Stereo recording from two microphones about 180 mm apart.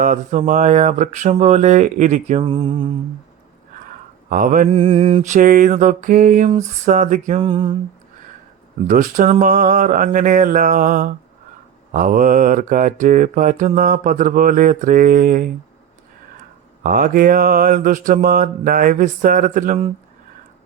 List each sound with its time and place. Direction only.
0.0 s speech: 45° right (ahead or behind)
2.4 s music: 30° right (ahead or behind)
3.8 s a sound: 50° right (ahead or behind)
4.7 s mantra: 30° right (ahead or behind)
7.4 s music: 30° right (ahead or behind)
8.9 s mantra: 45° right (ahead or behind)
16.8 s mantra: 50° right (ahead or behind)